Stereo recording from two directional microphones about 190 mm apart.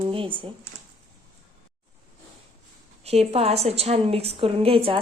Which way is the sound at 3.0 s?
35° right (ahead or behind).